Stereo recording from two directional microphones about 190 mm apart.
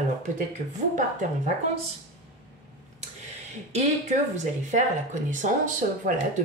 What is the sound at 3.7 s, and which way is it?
Speech, 40° right (ahead or behind).